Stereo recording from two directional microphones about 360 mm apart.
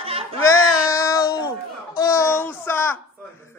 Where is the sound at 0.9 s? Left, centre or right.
Centre.